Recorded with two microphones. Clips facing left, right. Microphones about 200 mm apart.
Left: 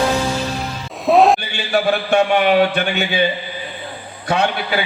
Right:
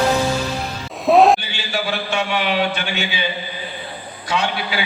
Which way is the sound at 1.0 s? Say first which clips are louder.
Even; centre (ahead or behind).